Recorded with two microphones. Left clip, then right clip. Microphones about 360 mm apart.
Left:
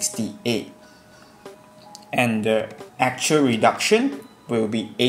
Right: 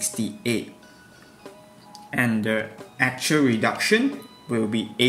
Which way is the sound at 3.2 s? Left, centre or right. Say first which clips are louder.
Left 5 dB; left.